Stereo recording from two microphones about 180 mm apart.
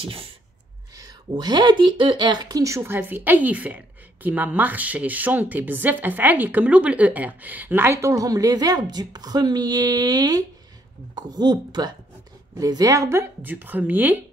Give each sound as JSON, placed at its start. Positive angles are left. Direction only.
{"t": 0.0, "sound": "speech", "side_deg": -30}